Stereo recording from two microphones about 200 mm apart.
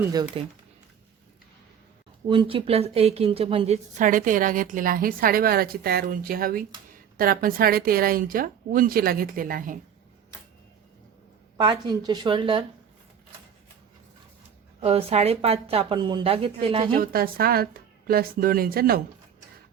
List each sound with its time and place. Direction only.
0.0 s speech: 20° right (ahead or behind)
2.2 s a woman's voice: 25° right (ahead or behind); by 9.7 s 45° right (ahead or behind)
11.5 s speech: 20° right (ahead or behind)
14.8 s speech: 30° right (ahead or behind)
16.9 s a woman's voice: 45° right (ahead or behind)